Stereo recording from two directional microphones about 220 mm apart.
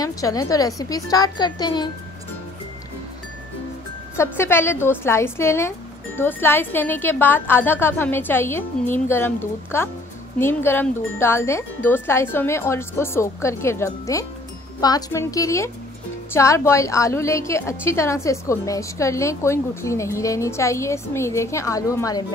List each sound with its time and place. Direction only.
0.0 s a woman's voice: 15° left (ahead or behind)
4.2 s a woman's voice: 10° left (ahead or behind)